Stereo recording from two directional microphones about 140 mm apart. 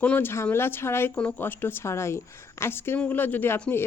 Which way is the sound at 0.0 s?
10° left (ahead or behind).